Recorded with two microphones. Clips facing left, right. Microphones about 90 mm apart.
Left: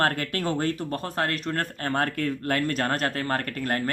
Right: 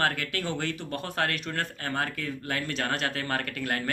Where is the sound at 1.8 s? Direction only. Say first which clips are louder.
Left 5 dB; 50° left (ahead or behind).